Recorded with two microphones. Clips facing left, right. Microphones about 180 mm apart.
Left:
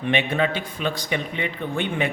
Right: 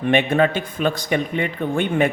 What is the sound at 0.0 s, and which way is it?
A man's voice, 50° right (ahead or behind).